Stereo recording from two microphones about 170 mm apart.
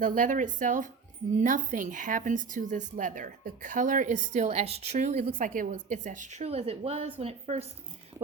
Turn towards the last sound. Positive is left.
turn(degrees=-40)  # may be behind; listen again after turning